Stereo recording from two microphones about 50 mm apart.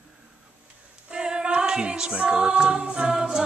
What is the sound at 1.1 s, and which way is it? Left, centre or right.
Music, centre.